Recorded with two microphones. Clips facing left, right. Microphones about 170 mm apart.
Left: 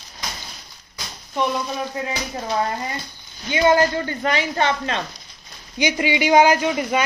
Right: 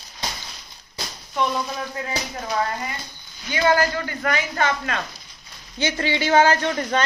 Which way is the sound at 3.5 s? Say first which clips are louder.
Left 3 dB; 25° left (ahead or behind).